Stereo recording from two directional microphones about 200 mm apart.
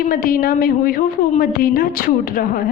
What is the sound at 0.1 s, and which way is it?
A woman's voice, 45° left (ahead or behind).